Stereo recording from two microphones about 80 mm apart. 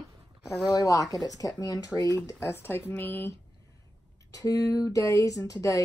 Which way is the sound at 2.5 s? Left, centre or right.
Left.